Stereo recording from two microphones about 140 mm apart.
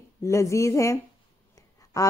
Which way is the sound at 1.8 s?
25° left (ahead or behind).